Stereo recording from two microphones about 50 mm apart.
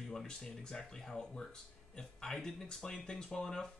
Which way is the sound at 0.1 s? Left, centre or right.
Centre.